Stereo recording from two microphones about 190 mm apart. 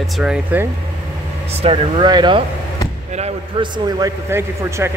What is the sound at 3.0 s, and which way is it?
A man's voice, 35° right (ahead or behind).